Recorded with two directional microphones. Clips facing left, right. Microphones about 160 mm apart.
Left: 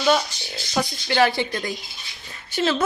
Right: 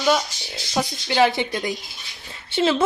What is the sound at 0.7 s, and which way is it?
A woman's voice, 10° right (ahead or behind).